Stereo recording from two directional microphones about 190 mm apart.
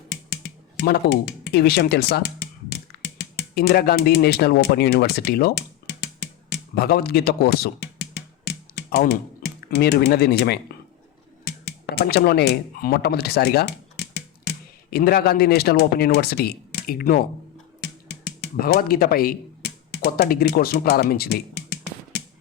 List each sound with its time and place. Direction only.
0.1 s a sound: 60° left (ahead or behind)
6.7 s speech: 55° left (ahead or behind)
11.6 s speech: 55° left (ahead or behind)
18.1 s typewriter: 60° left (ahead or behind)